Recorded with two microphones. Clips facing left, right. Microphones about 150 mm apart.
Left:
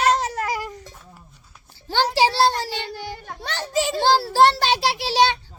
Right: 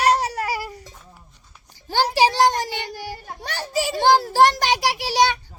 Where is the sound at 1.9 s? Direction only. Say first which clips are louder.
Right 1 dB; 10° right (ahead or behind).